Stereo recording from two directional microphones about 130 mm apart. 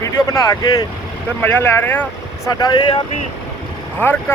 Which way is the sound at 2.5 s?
35° left (ahead or behind).